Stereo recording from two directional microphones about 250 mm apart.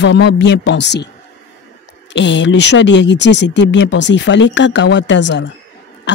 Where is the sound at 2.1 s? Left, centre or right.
Left.